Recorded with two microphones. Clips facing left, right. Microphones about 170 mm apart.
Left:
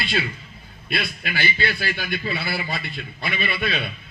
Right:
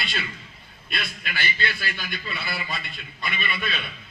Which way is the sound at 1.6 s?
45° left (ahead or behind).